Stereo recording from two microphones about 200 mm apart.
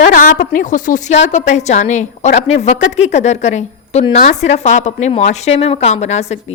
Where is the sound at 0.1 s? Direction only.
40° left (ahead or behind).